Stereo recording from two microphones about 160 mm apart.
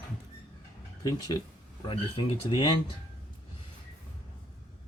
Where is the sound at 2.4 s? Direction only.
30° left (ahead or behind).